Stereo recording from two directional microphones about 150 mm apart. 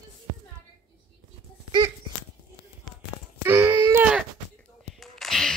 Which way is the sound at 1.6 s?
30° right (ahead or behind).